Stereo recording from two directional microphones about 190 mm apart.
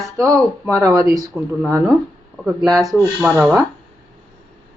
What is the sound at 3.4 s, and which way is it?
Speech, 10° right (ahead or behind).